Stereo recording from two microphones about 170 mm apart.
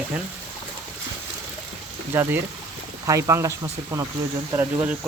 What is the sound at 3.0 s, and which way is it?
Speech, 20° right (ahead or behind).